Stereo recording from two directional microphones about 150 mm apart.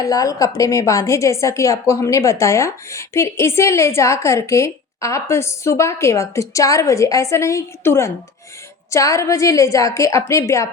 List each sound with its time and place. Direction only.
0.0 s a woman's voice: 25° left (ahead or behind)